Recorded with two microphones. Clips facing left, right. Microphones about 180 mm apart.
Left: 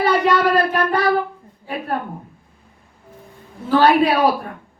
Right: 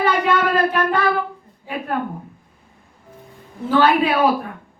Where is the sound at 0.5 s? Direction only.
40° left (ahead or behind).